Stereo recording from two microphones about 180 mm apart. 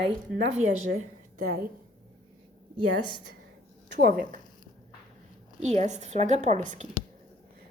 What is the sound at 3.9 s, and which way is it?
Speech, 60° right (ahead or behind).